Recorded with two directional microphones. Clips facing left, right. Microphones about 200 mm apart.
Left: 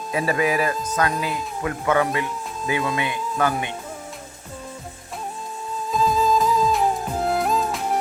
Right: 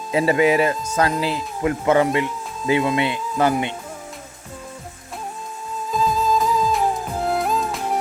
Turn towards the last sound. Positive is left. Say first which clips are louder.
# even
turn(degrees=0)  # may be behind; listen again after turning